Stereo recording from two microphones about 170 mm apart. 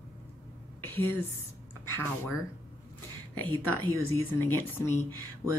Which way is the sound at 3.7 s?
15° left (ahead or behind).